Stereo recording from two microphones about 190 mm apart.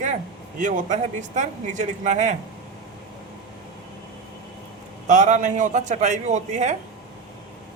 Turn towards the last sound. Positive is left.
turn(degrees=-40)  # may be behind; listen again after turning